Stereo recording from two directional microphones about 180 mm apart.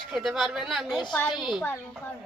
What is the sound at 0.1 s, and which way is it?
Speech, centre (ahead or behind).